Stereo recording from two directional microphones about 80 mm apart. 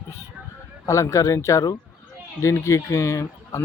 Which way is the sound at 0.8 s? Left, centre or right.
Left.